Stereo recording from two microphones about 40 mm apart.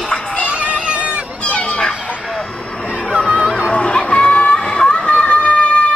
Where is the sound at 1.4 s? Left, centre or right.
Left.